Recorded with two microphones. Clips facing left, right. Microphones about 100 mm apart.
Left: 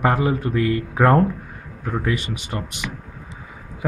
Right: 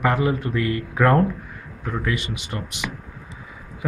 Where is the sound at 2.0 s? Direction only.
45° left (ahead or behind).